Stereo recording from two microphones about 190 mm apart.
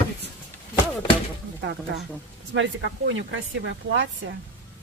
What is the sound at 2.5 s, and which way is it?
Speech, 75° right (ahead or behind).